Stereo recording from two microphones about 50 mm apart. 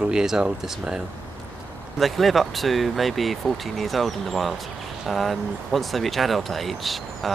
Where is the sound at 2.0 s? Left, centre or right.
Centre.